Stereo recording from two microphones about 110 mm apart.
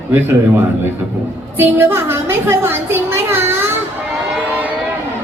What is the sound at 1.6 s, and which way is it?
Speech, 20° right (ahead or behind).